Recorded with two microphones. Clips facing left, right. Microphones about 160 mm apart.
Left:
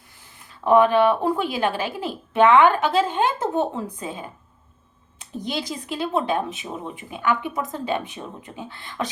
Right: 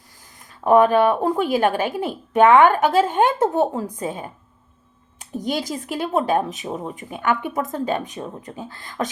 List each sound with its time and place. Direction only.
0.3 s a woman's voice: 45° right (ahead or behind)
5.2 s speech: 45° right (ahead or behind)